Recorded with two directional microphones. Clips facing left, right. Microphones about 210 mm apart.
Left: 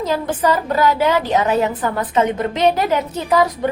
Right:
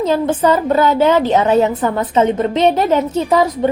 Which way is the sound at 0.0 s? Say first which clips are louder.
Right 4 dB; 25° right (ahead or behind).